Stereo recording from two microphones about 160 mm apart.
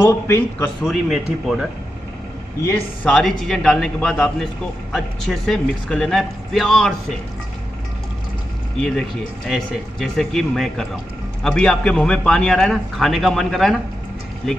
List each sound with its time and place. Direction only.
0.0 s a man's voice: 15° left (ahead or behind)
0.8 s a man's voice: centre (ahead or behind)
2.6 s a man's voice: 15° left (ahead or behind)
3.1 s a man's voice: centre (ahead or behind)
9.5 s a man's voice: centre (ahead or behind)